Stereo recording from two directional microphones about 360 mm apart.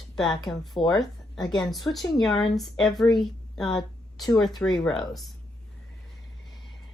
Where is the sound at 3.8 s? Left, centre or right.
Centre.